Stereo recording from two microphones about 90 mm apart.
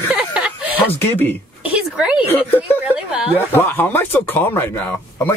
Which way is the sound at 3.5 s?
20° left (ahead or behind).